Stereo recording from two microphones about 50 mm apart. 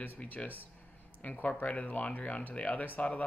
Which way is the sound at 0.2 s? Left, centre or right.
Left.